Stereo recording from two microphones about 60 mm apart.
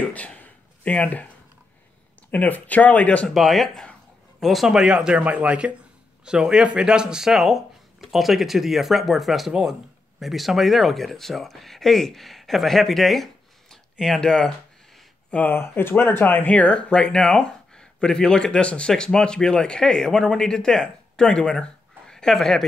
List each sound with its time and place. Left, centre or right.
0.0 s a sound: left
2.3 s speech: left
3.3 s speech: centre
9.5 s speech: centre
10.2 s speech: centre
15.3 s speech: left
16.5 s speech: centre